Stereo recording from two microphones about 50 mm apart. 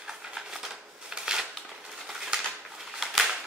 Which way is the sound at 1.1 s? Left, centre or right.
Centre.